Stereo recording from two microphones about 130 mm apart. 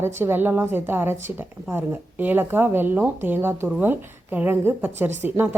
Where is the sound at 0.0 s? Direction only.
20° right (ahead or behind).